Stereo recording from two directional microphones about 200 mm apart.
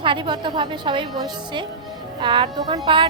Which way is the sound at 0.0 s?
25° right (ahead or behind).